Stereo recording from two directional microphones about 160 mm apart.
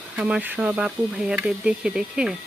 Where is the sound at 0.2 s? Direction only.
5° right (ahead or behind).